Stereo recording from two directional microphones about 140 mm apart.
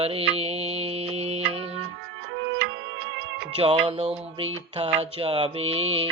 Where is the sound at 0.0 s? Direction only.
45° right (ahead or behind).